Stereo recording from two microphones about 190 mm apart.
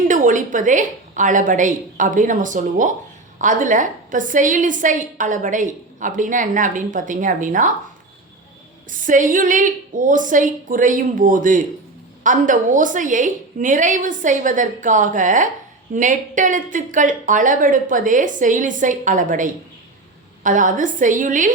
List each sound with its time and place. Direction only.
0.1 s a woman's voice: 40° right (ahead or behind)
8.9 s a woman's voice: 45° right (ahead or behind)